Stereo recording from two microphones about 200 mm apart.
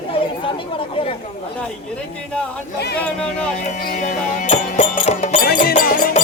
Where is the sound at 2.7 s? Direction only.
55° left (ahead or behind).